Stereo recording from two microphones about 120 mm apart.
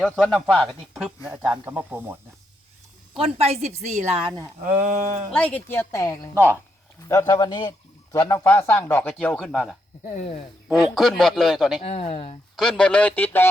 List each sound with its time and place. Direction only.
0.0 s a man's voice: centre (ahead or behind)
1.3 s speech: 15° right (ahead or behind)
3.2 s a woman's voice: 55° right (ahead or behind)
3.8 s speech: 65° right (ahead or behind)
4.3 s speech: 25° right (ahead or behind)
4.8 s speech: 70° right (ahead or behind)
5.3 s a man's voice: 10° left (ahead or behind)
6.3 s speech: 20° right (ahead or behind)
7.1 s a man's voice: 30° left (ahead or behind)
8.4 s a man's voice: 15° left (ahead or behind); by 9.7 s centre (ahead or behind)
10.2 s speech: 60° left (ahead or behind)
10.7 s a man's voice: centre (ahead or behind)
11.8 s speech: 55° left (ahead or behind)
12.5 s a man's voice: 5° left (ahead or behind)